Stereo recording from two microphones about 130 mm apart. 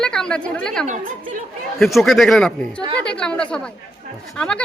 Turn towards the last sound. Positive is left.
turn(degrees=5)  # may be behind; listen again after turning